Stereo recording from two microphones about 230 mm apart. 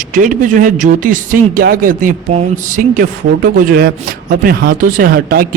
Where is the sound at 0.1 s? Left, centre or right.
Right.